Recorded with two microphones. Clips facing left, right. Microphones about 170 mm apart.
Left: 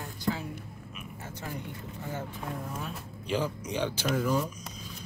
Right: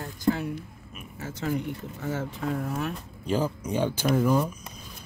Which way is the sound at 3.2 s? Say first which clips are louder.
Right 4 dB; 45° right (ahead or behind).